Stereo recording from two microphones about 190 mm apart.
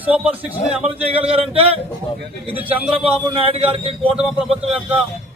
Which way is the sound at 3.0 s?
30° right (ahead or behind).